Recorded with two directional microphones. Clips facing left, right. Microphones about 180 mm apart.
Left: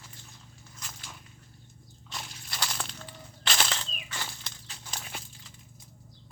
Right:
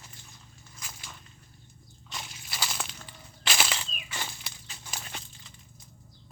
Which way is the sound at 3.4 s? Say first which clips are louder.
Even; 5° right (ahead or behind).